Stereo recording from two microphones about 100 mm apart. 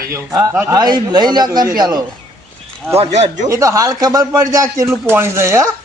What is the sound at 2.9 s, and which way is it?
Speech, 90° right.